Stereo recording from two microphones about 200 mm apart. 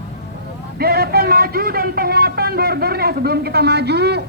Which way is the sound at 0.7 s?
50° right (ahead or behind).